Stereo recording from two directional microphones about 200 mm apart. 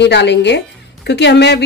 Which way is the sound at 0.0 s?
60° left (ahead or behind).